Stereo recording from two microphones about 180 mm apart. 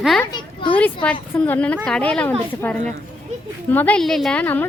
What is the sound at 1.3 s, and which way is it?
A woman's voice, 10° left (ahead or behind).